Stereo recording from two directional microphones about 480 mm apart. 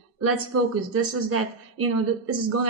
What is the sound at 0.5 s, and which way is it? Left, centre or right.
A woman's voice, right.